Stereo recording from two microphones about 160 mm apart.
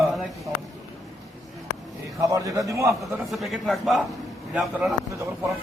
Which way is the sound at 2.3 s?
20° right (ahead or behind).